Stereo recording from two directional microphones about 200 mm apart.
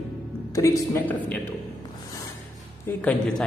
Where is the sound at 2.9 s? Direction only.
5° left (ahead or behind).